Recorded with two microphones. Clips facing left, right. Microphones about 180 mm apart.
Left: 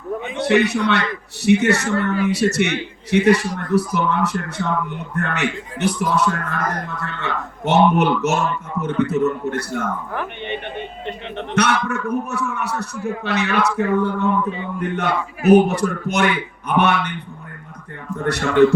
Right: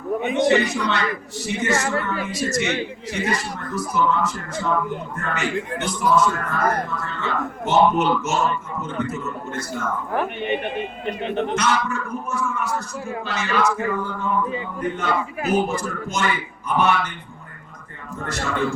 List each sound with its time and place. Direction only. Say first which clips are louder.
0.4 s speech: left 5 dB; 65° left (ahead or behind)
11.5 s speech: left 3 dB; 65° left (ahead or behind)
18.3 s speech: left 10 dB; 65° left (ahead or behind)